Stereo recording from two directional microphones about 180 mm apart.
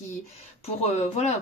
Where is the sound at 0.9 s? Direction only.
35° left (ahead or behind).